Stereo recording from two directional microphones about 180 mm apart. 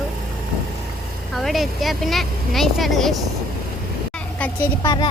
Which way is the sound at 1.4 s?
Centre (ahead or behind).